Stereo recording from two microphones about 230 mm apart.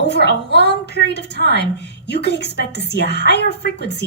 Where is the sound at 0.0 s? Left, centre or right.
Left.